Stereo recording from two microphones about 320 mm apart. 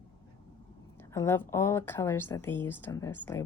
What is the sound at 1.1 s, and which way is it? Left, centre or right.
Speech, centre.